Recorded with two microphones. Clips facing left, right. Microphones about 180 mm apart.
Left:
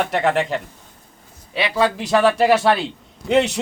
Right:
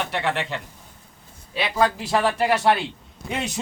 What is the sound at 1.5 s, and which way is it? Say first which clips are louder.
Speech: left 3 dB; 80° left.